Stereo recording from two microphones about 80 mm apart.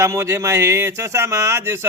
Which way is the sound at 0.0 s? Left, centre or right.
Right.